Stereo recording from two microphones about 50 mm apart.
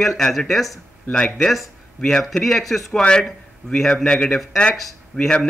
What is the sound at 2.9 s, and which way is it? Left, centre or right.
A man's voice, centre.